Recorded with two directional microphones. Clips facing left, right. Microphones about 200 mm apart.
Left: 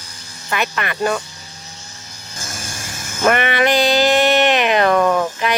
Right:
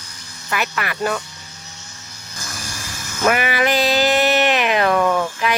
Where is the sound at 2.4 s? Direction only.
25° left (ahead or behind).